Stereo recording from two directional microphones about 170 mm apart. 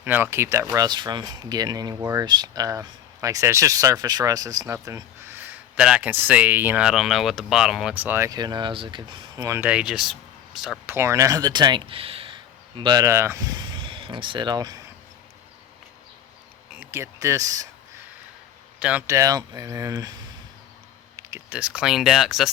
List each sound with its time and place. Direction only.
0.0 s speech: 10° right (ahead or behind)
10.8 s speech: 15° right (ahead or behind)
16.8 s speech: 15° right (ahead or behind)
18.8 s speech: 10° right (ahead or behind)
21.2 s speech: 15° right (ahead or behind); by 22.5 s centre (ahead or behind)